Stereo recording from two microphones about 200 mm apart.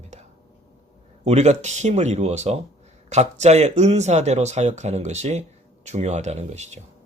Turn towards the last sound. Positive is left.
turn(degrees=-35)  # may be behind; listen again after turning